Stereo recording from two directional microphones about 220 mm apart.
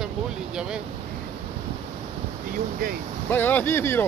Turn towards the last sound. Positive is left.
turn(degrees=10)  # may be behind; listen again after turning